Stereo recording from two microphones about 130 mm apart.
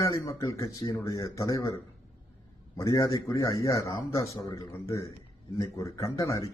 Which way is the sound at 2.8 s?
25° left (ahead or behind).